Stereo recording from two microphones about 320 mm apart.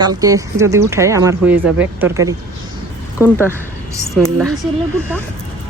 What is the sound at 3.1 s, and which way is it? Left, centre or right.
Speech, centre.